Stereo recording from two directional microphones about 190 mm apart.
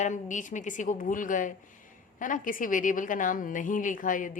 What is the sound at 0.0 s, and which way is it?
A woman's voice, 40° left (ahead or behind).